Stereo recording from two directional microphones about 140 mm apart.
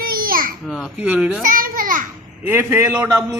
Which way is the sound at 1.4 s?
85° right.